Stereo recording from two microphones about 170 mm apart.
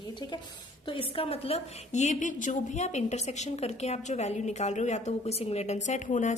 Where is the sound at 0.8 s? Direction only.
35° left (ahead or behind).